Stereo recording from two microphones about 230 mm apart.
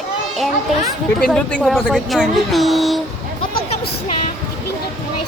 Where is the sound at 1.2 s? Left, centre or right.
Centre.